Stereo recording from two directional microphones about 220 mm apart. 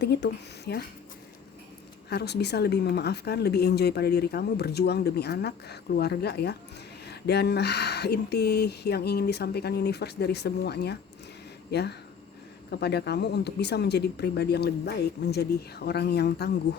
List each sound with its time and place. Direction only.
0.0 s speech: 50° left (ahead or behind)
2.0 s speech: 50° left (ahead or behind)